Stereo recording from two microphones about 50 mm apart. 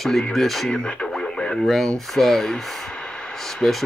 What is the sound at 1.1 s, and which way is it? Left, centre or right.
Radio, centre.